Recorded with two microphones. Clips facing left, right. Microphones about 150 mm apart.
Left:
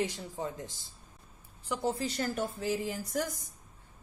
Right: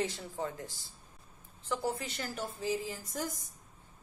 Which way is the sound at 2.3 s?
65° left (ahead or behind).